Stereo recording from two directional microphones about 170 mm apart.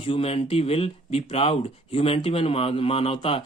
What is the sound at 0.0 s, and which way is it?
Speech, 35° left (ahead or behind).